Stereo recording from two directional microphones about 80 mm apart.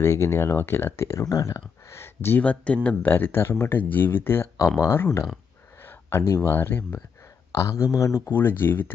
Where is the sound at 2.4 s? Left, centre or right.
Centre.